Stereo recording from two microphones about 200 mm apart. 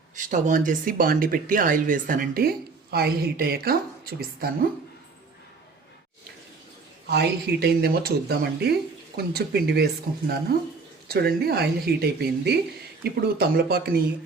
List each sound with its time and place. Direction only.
0.2 s speech: 40° right (ahead or behind)
7.1 s speech: 55° right (ahead or behind)